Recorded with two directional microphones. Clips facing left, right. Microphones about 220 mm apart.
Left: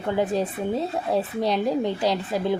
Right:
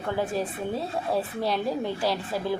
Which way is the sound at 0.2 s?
20° left (ahead or behind).